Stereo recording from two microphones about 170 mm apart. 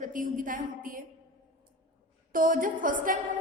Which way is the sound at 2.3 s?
55° right (ahead or behind).